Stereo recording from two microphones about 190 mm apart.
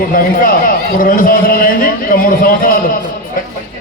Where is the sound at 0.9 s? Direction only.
45° left (ahead or behind).